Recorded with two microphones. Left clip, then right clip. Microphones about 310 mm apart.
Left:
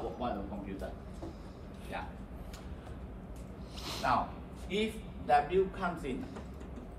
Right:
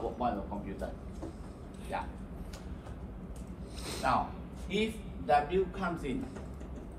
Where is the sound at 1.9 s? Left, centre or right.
Centre.